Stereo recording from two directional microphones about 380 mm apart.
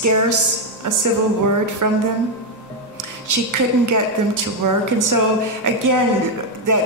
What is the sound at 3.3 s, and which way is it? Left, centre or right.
Speech, right.